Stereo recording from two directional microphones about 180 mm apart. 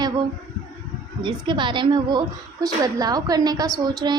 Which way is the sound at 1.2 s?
25° right (ahead or behind).